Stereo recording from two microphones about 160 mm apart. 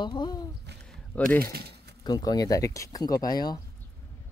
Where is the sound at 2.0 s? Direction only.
25° left (ahead or behind).